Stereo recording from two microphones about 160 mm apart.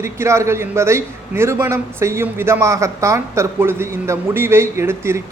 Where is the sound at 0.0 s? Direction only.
15° right (ahead or behind).